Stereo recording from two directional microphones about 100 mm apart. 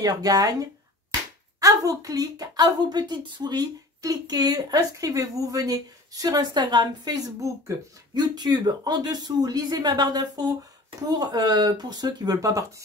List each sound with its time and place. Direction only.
0.0 s a woman's voice: 40° right (ahead or behind)